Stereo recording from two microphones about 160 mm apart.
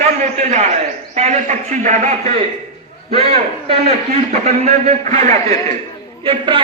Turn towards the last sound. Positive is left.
turn(degrees=-30)  # may be behind; listen again after turning